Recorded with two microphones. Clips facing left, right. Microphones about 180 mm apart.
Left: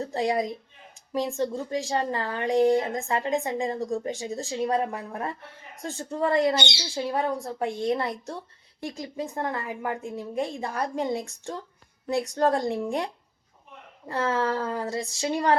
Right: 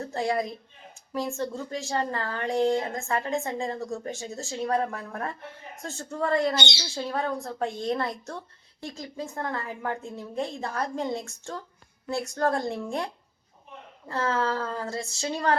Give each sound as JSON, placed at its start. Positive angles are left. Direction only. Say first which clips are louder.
{"t": 0.0, "sound": "a woman's voice", "louder": "left 2 dB", "side_deg": 15}
{"t": 14.1, "sound": "a woman's voice", "louder": "left 1 dB", "side_deg": 15}